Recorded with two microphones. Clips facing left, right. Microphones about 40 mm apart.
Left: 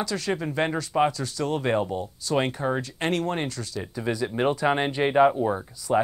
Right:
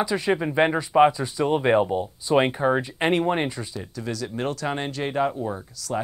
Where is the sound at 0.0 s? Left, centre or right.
Right.